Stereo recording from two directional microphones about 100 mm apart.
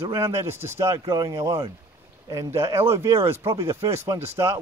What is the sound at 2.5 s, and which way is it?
Speech, 70° right (ahead or behind).